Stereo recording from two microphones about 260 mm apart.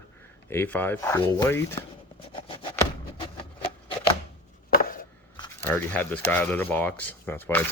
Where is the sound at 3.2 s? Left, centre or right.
Left.